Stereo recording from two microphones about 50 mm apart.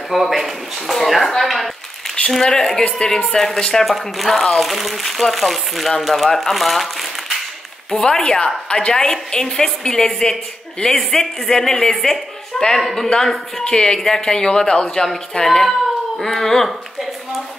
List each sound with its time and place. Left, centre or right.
0.1 s a woman's voice: centre
7.9 s a woman's voice: centre